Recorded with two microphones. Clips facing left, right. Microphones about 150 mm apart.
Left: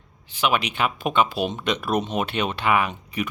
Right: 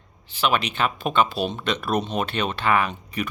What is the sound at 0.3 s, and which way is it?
Speech, 15° left (ahead or behind).